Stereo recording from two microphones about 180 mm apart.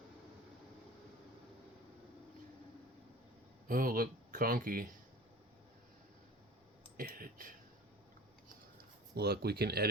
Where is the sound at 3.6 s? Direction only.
50° right (ahead or behind).